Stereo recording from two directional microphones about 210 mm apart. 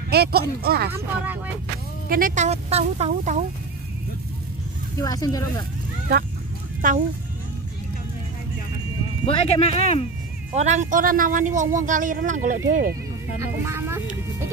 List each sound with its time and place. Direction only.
0.1 s speech: 50° right (ahead or behind)
0.9 s speech: 10° right (ahead or behind)
2.0 s a woman's voice: 40° right (ahead or behind)
4.9 s speech: 15° left (ahead or behind)
6.8 s a woman's voice: 40° right (ahead or behind)
9.2 s speech: 30° left (ahead or behind)
10.5 s a woman's voice: 35° right (ahead or behind)
13.4 s speech: 10° right (ahead or behind)